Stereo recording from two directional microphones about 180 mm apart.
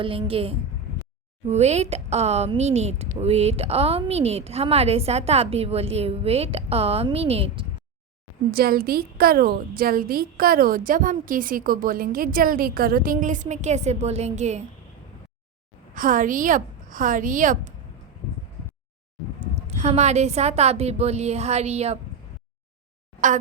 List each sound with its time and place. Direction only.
0.0 s a woman's voice: 30° right (ahead or behind)
8.4 s a woman's voice: 55° right (ahead or behind); by 14.6 s 40° right (ahead or behind)
16.0 s a woman's voice: 50° right (ahead or behind)
19.6 s a woman's voice: 40° right (ahead or behind)